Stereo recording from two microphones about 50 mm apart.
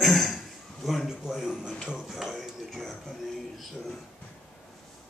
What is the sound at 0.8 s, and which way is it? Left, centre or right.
A man's voice, centre.